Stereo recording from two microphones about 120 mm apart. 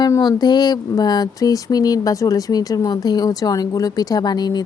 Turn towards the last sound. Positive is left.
turn(degrees=35)  # may be behind; listen again after turning